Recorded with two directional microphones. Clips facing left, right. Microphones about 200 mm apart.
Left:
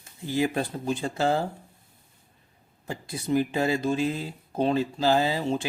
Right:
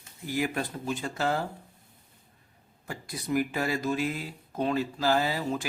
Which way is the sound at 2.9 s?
25° left (ahead or behind).